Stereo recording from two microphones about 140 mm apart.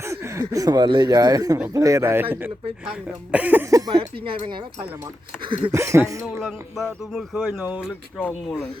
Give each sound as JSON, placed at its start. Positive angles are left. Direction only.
{"t": 0.0, "sound": "speech", "side_deg": -20}
{"t": 2.8, "sound": "speech", "side_deg": -5}
{"t": 5.7, "sound": "speech", "side_deg": -20}
{"t": 6.3, "sound": "speech", "side_deg": 0}